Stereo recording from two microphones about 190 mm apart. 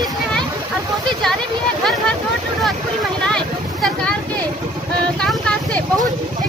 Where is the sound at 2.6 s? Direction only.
Centre (ahead or behind).